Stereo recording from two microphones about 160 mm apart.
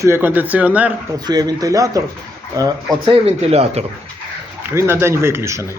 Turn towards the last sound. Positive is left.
turn(degrees=-15)  # may be behind; listen again after turning